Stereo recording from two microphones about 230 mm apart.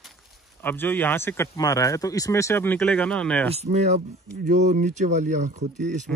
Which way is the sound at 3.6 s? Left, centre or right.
Right.